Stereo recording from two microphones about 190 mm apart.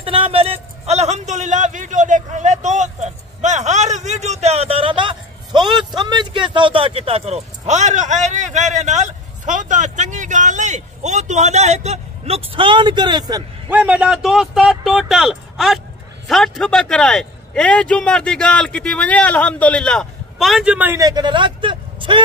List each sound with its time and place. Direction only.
0.0 s a man's voice: 30° right (ahead or behind)
13.7 s a man's voice: 10° right (ahead or behind); by 22.2 s 25° right (ahead or behind)